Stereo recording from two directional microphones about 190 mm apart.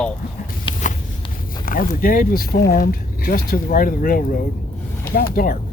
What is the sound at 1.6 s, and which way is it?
Speech, 45° left (ahead or behind).